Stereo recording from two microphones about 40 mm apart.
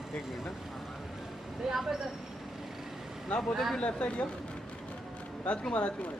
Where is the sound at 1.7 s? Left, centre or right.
Centre.